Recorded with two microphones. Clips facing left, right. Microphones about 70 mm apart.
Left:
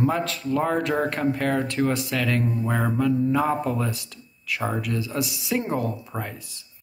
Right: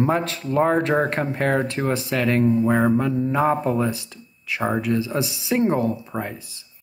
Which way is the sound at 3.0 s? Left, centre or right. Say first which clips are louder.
Right 1 dB; right.